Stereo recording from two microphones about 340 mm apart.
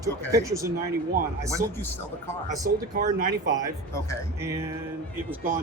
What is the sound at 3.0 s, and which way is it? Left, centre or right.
Speech, right.